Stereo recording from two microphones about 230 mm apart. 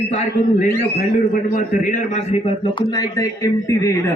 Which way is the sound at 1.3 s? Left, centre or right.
Left.